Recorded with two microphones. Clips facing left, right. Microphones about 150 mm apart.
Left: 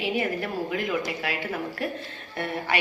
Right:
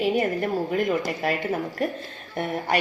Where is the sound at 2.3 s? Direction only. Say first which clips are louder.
Right 3 dB; 45° right (ahead or behind).